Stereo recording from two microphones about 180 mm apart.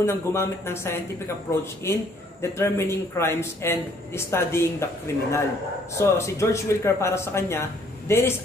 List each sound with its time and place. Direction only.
0.0 s speech: 15° left (ahead or behind)